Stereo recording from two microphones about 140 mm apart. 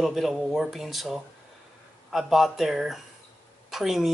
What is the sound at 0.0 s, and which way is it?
Speech, centre (ahead or behind).